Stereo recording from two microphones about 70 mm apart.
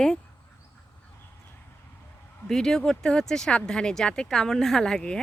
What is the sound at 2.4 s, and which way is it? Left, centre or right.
Speech, centre.